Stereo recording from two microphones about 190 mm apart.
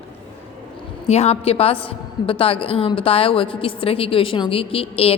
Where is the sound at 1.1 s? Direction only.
35° left (ahead or behind).